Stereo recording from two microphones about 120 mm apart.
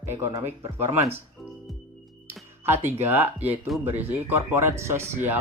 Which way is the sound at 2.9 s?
15° right (ahead or behind).